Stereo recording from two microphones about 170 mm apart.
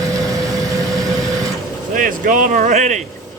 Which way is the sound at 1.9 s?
55° right (ahead or behind).